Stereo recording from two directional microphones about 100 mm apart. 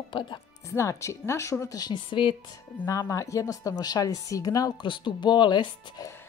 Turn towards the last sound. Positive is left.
turn(degrees=50)  # may be behind; listen again after turning